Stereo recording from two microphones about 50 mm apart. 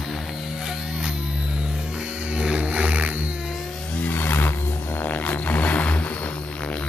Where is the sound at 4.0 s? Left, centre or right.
Left.